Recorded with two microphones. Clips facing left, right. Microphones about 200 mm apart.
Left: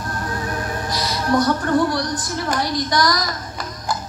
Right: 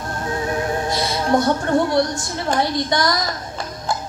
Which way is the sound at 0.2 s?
25° right (ahead or behind).